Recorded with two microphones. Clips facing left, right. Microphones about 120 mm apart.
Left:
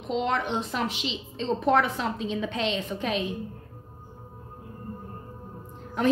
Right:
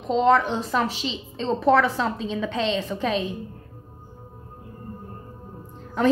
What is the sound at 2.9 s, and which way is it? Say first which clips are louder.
Speech: right 4 dB; 90° right.